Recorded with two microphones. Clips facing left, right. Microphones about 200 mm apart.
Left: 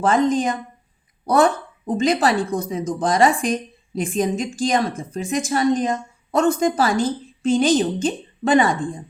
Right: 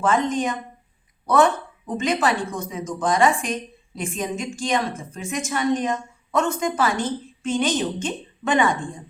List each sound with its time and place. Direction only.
0.0 s a woman's voice: 35° left (ahead or behind)
1.9 s a woman's voice: 35° left (ahead or behind)